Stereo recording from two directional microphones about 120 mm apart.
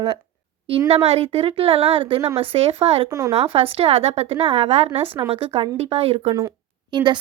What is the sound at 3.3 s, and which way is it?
Speech, 50° right (ahead or behind).